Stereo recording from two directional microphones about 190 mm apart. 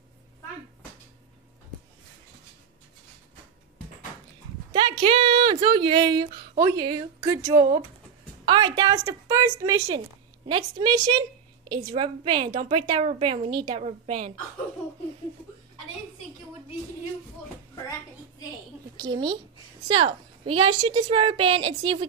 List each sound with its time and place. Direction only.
4.7 s a woman's voice: 25° right (ahead or behind)
18.9 s a woman's voice: 25° right (ahead or behind)